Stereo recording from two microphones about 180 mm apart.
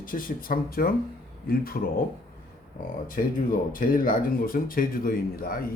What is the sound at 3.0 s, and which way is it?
Speech, 50° left (ahead or behind).